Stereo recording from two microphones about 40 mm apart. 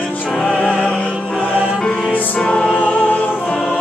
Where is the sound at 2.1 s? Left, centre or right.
Left.